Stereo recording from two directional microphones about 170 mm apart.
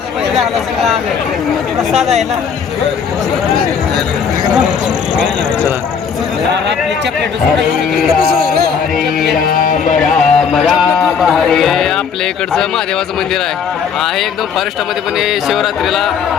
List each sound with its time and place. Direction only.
0.3 s speech: centre (ahead or behind)
9.5 s music: 55° left (ahead or behind)
10.0 s a sound: centre (ahead or behind)
15.2 s speech: centre (ahead or behind)